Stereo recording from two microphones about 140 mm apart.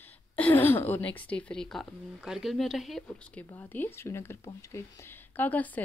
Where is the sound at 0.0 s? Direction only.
15° left (ahead or behind).